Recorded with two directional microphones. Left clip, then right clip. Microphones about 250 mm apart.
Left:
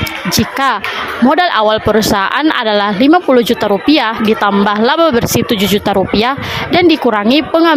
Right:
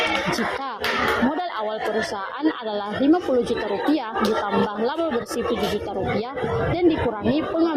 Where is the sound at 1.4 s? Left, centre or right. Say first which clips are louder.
Left 15 dB; left.